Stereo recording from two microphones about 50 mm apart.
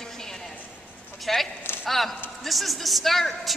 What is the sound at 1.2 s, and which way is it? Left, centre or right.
A woman's voice, centre.